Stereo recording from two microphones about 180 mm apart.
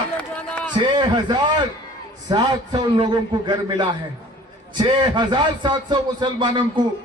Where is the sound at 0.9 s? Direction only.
25° right (ahead or behind).